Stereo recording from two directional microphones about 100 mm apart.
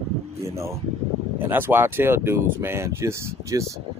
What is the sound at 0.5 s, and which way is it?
A man's voice, 30° right (ahead or behind).